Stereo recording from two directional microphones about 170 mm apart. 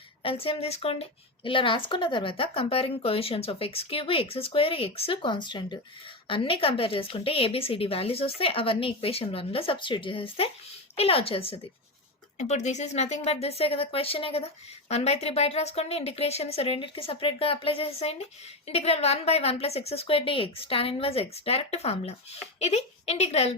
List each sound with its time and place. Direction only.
0.2 s speech: 35° left (ahead or behind)